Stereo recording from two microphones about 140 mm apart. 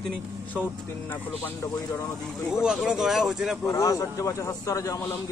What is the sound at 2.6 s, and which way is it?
Speech, 5° right (ahead or behind).